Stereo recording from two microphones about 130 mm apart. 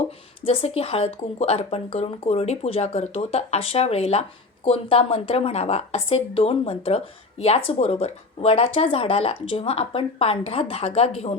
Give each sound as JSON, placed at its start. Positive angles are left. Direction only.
{"t": 0.4, "sound": "speech", "side_deg": 50}